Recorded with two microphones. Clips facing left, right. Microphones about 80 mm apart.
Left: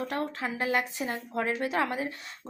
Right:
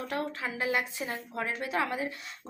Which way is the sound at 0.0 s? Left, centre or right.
Left.